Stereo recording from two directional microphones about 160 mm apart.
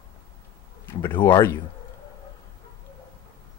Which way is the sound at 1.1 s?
25° left (ahead or behind).